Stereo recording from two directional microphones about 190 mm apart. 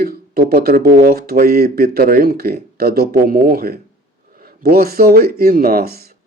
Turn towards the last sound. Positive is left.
turn(degrees=-55)  # may be behind; listen again after turning